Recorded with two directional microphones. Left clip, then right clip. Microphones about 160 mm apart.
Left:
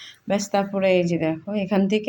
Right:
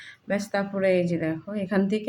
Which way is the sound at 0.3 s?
20° left (ahead or behind).